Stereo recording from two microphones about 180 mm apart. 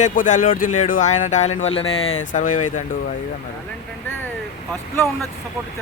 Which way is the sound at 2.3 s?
45° left (ahead or behind).